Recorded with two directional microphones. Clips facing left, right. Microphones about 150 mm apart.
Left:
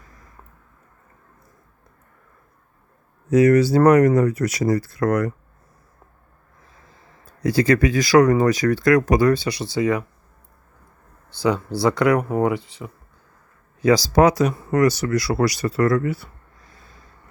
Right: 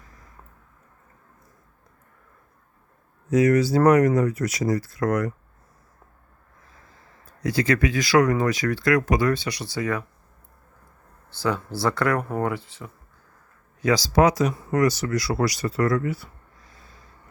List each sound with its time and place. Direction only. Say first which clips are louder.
3.2 s speech: left 4 dB; 65° left (ahead or behind)
7.3 s speech: left 5 dB; 35° left (ahead or behind)
11.3 s speech: left 5 dB; 15° left (ahead or behind)
13.8 s speech: left 4 dB; 40° left (ahead or behind); by 16.3 s 65° left (ahead or behind)